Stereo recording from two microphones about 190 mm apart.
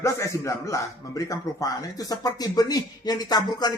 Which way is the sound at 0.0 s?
15° left (ahead or behind).